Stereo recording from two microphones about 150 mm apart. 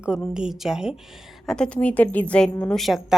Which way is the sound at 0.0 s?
5° right (ahead or behind).